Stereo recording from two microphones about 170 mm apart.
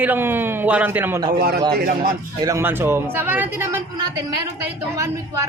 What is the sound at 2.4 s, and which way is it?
Speech, 15° right (ahead or behind).